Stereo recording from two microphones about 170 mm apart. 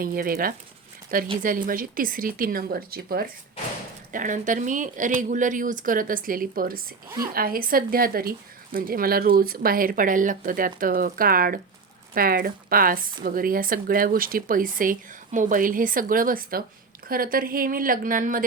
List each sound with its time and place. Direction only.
0.0 s speech: 55° right (ahead or behind)
4.1 s speech: 50° right (ahead or behind)